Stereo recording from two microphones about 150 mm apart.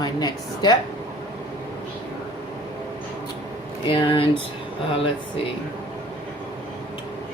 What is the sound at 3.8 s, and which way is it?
Speech, 35° left (ahead or behind).